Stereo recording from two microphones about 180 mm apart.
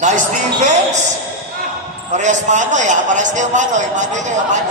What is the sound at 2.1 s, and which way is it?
A man's voice, 40° right (ahead or behind).